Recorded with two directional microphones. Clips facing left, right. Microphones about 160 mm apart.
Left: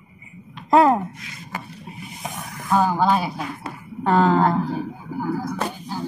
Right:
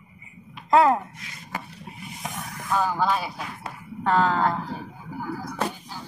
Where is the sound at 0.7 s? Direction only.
15° left (ahead or behind).